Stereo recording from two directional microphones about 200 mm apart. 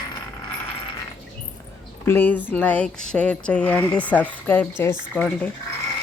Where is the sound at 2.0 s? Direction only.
10° left (ahead or behind).